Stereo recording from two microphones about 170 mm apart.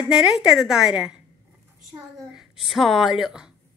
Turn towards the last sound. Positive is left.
turn(degrees=-5)  # may be behind; listen again after turning